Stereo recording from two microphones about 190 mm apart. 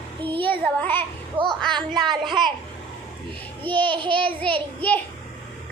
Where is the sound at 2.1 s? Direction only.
25° right (ahead or behind).